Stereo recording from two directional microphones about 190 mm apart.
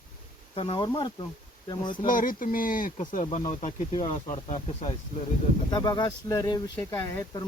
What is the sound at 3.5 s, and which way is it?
Speech, 35° left (ahead or behind).